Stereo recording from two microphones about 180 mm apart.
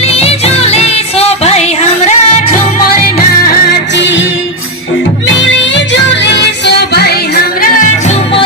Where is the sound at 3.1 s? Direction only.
55° left (ahead or behind).